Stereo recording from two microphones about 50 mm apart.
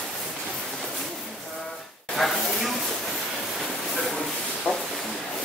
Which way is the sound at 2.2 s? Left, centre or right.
Centre.